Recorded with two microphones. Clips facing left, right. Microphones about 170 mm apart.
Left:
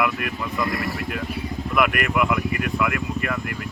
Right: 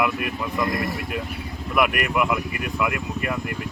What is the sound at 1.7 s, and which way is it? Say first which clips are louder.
Speech: even; 10° right (ahead or behind).